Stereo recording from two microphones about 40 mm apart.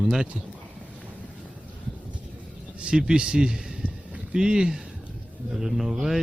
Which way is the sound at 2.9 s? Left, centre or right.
Centre.